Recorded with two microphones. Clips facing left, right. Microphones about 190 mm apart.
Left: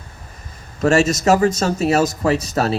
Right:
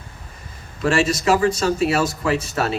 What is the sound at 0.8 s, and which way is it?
Speech, 45° left (ahead or behind).